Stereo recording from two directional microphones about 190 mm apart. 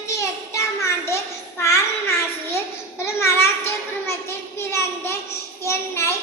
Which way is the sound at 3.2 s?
15° left (ahead or behind).